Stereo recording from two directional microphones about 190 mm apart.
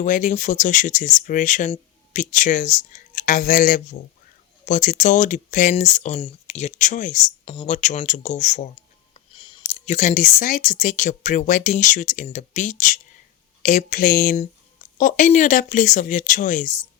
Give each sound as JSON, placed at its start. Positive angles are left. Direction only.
{"t": 0.0, "sound": "speech", "side_deg": 40}
{"t": 9.1, "sound": "speech", "side_deg": 25}